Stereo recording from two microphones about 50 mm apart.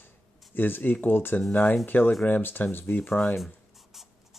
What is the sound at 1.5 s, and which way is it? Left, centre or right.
Speech, left.